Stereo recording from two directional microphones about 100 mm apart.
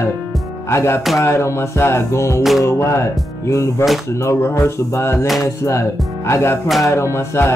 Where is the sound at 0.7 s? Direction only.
25° left (ahead or behind).